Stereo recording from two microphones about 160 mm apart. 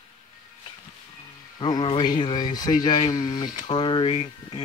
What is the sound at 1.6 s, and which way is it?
Speech, 30° left (ahead or behind).